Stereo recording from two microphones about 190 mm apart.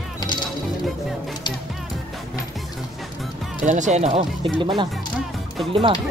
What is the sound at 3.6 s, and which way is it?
Speech, 40° right (ahead or behind).